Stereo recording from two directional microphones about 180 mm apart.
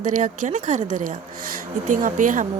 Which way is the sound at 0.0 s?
45° right (ahead or behind).